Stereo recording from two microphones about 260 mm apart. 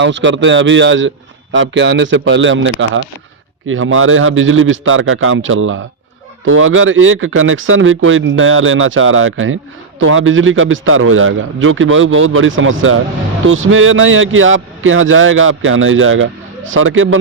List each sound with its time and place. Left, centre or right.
0.0 s a man's voice: right